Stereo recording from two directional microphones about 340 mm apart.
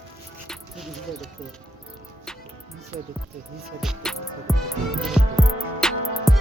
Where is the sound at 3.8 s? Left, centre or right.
Centre.